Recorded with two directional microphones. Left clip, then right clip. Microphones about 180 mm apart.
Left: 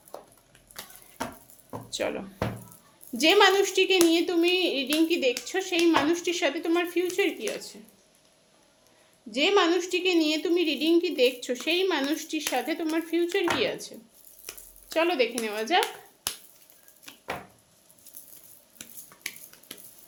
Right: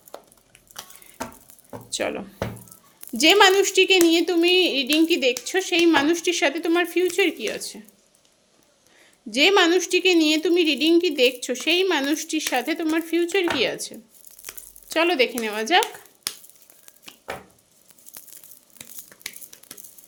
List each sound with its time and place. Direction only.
1.9 s speech: 35° right (ahead or behind)
9.3 s speech: 45° right (ahead or behind)